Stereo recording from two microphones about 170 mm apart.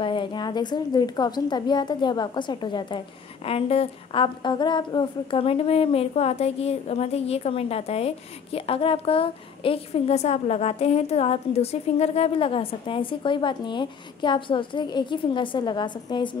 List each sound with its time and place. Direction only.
0.0 s a woman's voice: 30° left (ahead or behind)